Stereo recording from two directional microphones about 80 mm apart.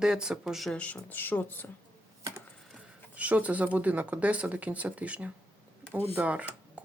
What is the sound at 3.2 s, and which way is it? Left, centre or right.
Speech, centre.